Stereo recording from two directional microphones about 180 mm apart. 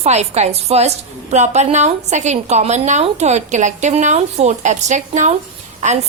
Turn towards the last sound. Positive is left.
turn(degrees=-45)  # may be behind; listen again after turning